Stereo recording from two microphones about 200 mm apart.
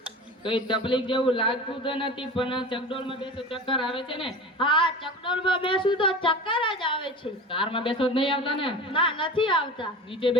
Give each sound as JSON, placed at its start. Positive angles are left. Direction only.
{"t": 0.4, "sound": "a man's voice", "side_deg": 25}